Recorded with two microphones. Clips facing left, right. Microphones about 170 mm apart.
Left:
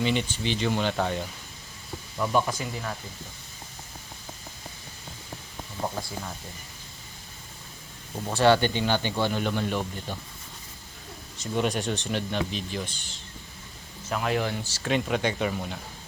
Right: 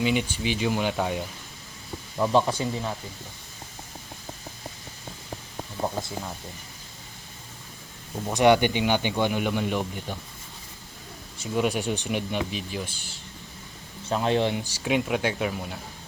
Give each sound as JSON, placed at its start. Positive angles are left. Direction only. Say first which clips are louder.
{"t": 0.0, "sound": "speech", "louder": "right 2 dB", "side_deg": -5}
{"t": 2.1, "sound": "speech", "louder": "right 3 dB", "side_deg": -25}
{"t": 8.3, "sound": "speech", "louder": "right 2 dB", "side_deg": -15}
{"t": 11.3, "sound": "speech", "louder": "right 2 dB", "side_deg": -5}
{"t": 14.0, "sound": "speech", "louder": "right 4 dB", "side_deg": -30}
{"t": 14.6, "sound": "speech", "louder": "right 2 dB", "side_deg": -10}